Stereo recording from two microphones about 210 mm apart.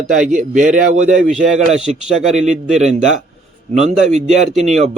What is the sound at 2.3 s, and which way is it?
Speech, 35° right (ahead or behind).